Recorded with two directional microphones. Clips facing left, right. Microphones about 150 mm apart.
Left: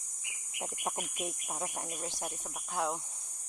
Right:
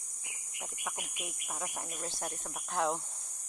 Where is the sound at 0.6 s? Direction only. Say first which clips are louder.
Left 5 dB; 40° left (ahead or behind).